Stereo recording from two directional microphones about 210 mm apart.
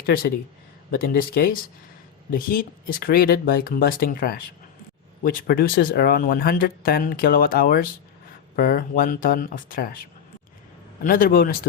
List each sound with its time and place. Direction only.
0.0 s speech: 45° left (ahead or behind)
11.0 s speech: 40° left (ahead or behind)